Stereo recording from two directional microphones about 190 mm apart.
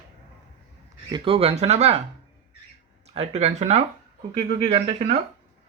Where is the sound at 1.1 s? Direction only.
30° right (ahead or behind).